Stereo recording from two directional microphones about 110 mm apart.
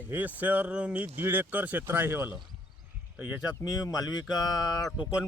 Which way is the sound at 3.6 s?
35° left (ahead or behind).